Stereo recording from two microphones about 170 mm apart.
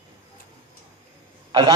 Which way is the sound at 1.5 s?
25° right (ahead or behind).